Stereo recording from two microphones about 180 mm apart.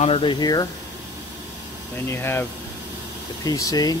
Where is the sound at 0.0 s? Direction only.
30° left (ahead or behind).